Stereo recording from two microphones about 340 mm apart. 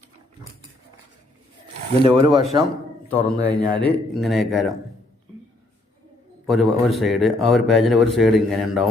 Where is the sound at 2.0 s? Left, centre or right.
Centre.